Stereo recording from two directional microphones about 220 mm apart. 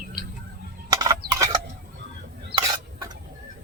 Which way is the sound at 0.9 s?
15° right (ahead or behind).